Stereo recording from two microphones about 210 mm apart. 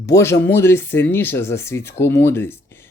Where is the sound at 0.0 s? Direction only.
15° left (ahead or behind).